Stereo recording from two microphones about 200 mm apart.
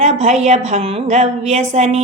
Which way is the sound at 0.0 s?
35° right (ahead or behind).